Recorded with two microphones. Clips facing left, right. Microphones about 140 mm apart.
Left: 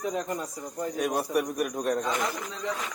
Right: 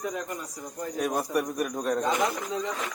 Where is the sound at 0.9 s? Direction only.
Centre (ahead or behind).